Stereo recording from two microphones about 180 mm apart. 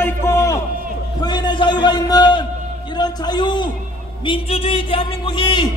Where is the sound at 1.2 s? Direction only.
25° left (ahead or behind).